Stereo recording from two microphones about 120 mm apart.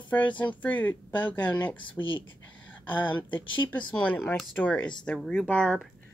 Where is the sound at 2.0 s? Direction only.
25° left (ahead or behind).